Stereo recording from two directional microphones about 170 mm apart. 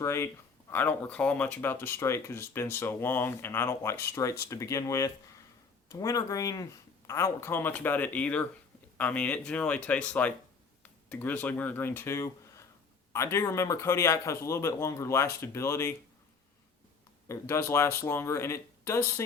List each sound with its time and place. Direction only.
0.0 s speech: 15° left (ahead or behind)
17.2 s speech: 15° left (ahead or behind)